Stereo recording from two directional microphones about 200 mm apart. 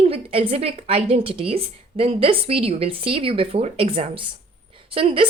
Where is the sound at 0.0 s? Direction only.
30° right (ahead or behind).